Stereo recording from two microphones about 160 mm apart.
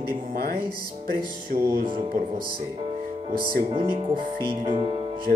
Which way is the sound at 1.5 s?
55° right (ahead or behind).